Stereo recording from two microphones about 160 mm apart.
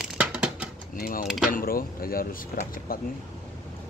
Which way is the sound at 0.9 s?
60° left (ahead or behind).